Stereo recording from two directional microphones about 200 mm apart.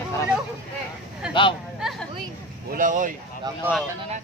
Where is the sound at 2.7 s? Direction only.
40° right (ahead or behind).